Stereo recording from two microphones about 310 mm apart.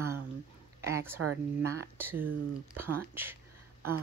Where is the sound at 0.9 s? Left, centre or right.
Centre.